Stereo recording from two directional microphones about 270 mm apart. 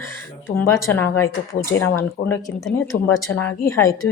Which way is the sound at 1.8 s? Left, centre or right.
Left.